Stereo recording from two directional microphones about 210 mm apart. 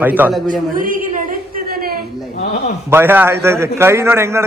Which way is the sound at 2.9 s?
10° right (ahead or behind).